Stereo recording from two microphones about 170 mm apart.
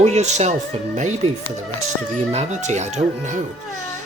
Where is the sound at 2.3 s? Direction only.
40° right (ahead or behind).